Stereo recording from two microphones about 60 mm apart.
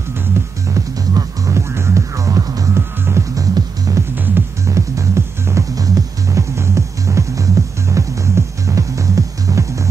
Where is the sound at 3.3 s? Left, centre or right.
Right.